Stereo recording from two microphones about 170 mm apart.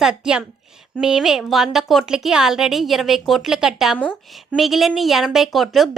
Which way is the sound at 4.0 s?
10° left (ahead or behind).